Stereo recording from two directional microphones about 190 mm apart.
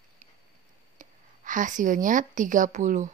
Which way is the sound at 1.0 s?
45° right (ahead or behind).